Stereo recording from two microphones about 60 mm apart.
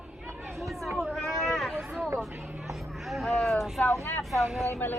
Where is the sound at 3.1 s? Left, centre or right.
Centre.